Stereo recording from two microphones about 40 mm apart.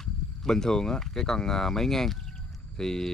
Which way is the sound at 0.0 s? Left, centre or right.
Centre.